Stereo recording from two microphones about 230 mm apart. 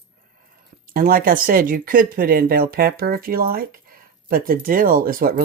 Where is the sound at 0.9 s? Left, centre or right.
Right.